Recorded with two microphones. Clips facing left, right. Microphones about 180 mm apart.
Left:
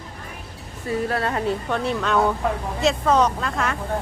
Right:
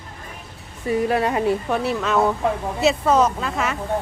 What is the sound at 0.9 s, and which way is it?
Speech, 15° right (ahead or behind).